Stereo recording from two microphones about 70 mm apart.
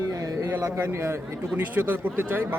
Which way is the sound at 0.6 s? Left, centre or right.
Right.